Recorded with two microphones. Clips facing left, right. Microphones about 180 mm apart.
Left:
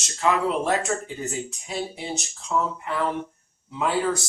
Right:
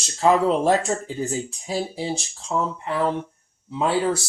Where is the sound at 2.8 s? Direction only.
30° right (ahead or behind).